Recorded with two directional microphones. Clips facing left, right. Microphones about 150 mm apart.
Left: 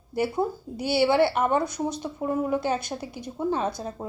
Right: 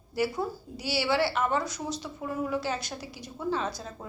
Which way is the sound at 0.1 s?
55° left (ahead or behind).